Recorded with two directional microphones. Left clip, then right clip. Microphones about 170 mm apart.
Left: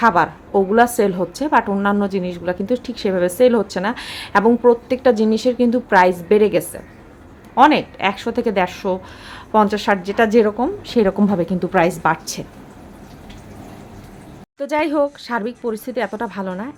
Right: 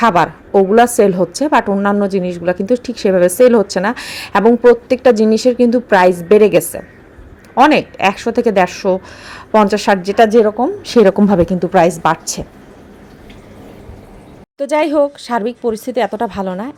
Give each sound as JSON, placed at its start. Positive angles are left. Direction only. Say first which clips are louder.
{"t": 0.0, "sound": "a woman's voice", "louder": "right 3 dB", "side_deg": -30}
{"t": 10.2, "sound": "a woman's voice", "louder": "right 2 dB", "side_deg": -10}
{"t": 10.8, "sound": "a woman's voice", "louder": "right 8 dB", "side_deg": -35}
{"t": 14.6, "sound": "a woman's voice", "louder": "right 5 dB", "side_deg": -20}